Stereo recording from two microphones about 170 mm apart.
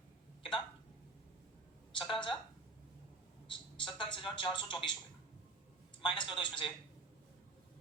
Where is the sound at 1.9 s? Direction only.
30° left (ahead or behind).